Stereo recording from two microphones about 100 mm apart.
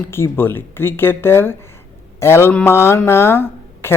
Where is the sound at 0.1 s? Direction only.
25° left (ahead or behind).